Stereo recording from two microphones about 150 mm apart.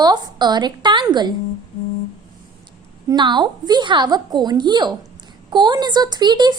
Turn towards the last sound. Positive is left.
turn(degrees=-30)  # may be behind; listen again after turning